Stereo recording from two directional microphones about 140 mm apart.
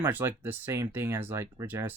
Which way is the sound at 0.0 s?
15° right (ahead or behind).